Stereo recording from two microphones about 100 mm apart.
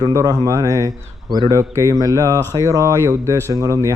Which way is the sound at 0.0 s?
35° right (ahead or behind).